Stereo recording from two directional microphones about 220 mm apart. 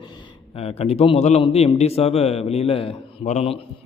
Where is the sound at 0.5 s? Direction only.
25° left (ahead or behind).